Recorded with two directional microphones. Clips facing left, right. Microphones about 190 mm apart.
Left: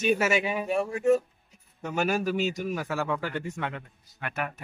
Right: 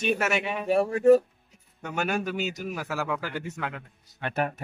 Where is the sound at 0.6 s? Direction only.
35° right (ahead or behind).